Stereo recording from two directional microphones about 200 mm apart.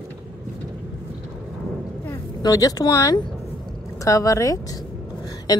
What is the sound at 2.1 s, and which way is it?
Speech, 15° left (ahead or behind).